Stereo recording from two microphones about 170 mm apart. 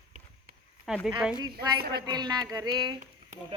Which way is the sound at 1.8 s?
70° right (ahead or behind).